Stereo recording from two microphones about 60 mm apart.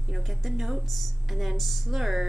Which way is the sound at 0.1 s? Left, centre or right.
Centre.